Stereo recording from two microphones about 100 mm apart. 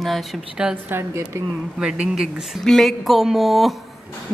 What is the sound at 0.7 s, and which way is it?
Speech, 20° right (ahead or behind).